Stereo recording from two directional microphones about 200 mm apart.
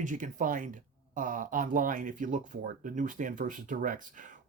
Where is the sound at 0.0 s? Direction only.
40° right (ahead or behind).